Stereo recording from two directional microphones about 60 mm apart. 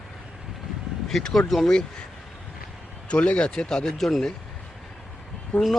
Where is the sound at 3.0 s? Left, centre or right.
Centre.